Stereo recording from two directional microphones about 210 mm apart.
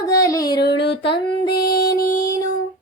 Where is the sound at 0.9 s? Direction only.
25° left (ahead or behind).